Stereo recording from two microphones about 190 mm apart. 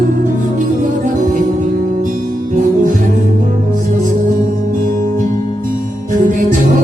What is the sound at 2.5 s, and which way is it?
Music, 45° right (ahead or behind).